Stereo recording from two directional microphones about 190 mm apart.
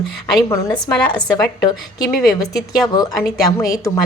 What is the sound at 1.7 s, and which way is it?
A woman's voice, 20° left (ahead or behind).